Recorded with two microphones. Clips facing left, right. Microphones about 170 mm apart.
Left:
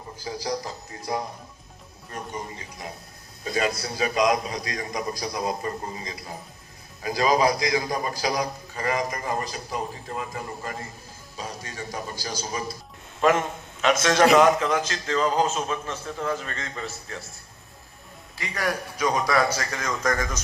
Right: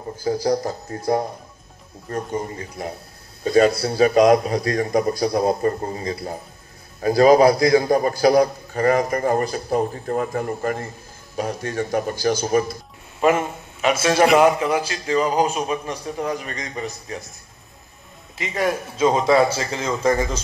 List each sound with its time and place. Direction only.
0.2 s a man's voice: 55° right (ahead or behind)
3.4 s a man's voice: 35° right (ahead or behind)
5.6 s a man's voice: 45° right (ahead or behind)
8.7 s a man's voice: 55° right (ahead or behind)
9.2 s a man's voice: 35° right (ahead or behind)
10.0 s a man's voice: 50° right (ahead or behind)
13.2 s a man's voice: 10° right (ahead or behind)
18.4 s a man's voice: 25° right (ahead or behind)